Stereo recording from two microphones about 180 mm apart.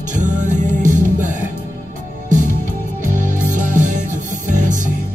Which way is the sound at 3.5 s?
45° right (ahead or behind).